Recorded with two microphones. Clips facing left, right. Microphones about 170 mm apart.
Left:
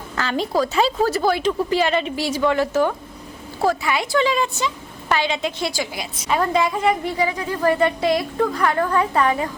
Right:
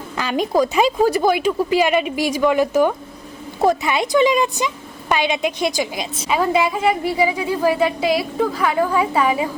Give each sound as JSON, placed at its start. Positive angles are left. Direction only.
{"t": 0.2, "sound": "a woman's voice", "side_deg": -15}
{"t": 6.2, "sound": "a woman's voice", "side_deg": -5}